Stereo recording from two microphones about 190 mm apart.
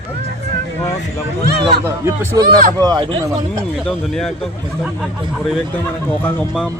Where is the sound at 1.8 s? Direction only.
15° right (ahead or behind).